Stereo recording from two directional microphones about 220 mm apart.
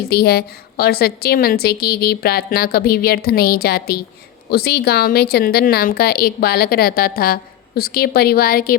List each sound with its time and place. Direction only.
0.1 s a woman's voice: 45° left (ahead or behind)